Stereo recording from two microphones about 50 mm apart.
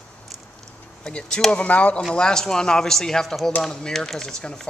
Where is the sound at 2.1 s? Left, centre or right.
Centre.